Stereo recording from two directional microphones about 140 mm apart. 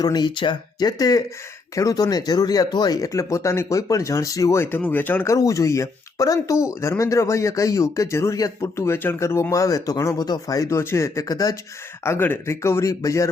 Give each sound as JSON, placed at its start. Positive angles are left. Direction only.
{"t": 0.0, "sound": "speech", "side_deg": 30}